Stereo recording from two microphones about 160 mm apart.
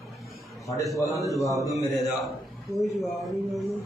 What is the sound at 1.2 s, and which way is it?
Speech, 20° left (ahead or behind).